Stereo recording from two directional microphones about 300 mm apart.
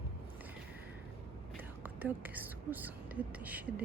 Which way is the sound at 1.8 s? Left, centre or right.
Centre.